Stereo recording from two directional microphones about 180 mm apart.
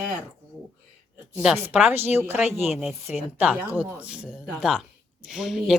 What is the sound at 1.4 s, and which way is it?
Speech, 5° right (ahead or behind).